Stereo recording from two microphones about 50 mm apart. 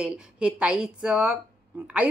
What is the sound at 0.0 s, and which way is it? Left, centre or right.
Speech, centre.